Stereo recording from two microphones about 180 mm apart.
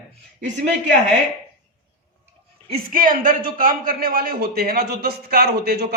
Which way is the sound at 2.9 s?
50° right (ahead or behind).